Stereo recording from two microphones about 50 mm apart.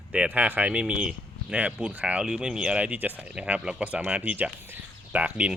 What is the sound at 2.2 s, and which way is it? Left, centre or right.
Speech, centre.